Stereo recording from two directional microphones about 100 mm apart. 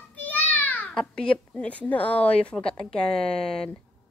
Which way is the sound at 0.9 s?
5° left (ahead or behind).